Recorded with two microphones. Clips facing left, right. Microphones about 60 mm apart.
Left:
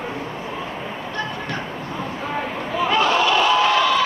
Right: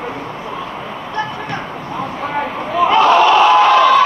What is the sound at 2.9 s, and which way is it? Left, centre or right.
Crowd, right.